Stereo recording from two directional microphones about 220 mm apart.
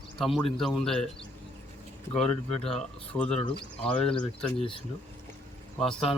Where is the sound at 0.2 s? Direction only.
Centre (ahead or behind).